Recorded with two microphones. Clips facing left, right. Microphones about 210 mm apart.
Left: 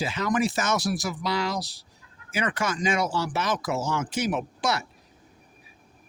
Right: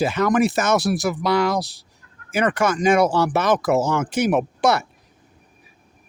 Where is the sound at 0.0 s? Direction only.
60° right (ahead or behind).